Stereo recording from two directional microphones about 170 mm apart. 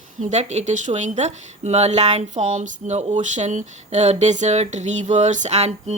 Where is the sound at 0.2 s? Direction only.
45° right (ahead or behind).